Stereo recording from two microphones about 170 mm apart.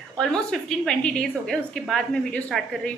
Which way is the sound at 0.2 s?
5° left (ahead or behind).